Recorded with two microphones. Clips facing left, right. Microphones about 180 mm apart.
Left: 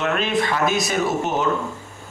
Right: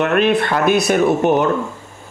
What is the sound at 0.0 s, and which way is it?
A man's voice, 60° right (ahead or behind).